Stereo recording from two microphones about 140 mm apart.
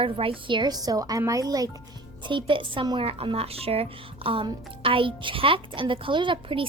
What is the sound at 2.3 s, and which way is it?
A woman's voice, 35° right (ahead or behind).